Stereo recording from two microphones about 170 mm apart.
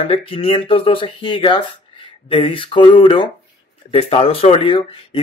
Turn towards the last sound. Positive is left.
turn(degrees=30)  # may be behind; listen again after turning